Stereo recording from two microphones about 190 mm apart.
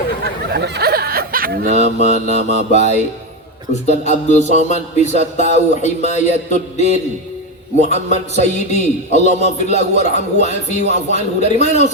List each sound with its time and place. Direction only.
0.5 s snicker: 60° right (ahead or behind)
1.8 s speech: 35° left (ahead or behind)